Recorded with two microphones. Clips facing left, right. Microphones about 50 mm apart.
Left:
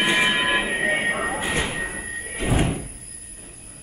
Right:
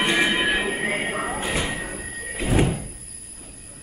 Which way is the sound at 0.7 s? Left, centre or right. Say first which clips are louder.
Left 3 dB; left.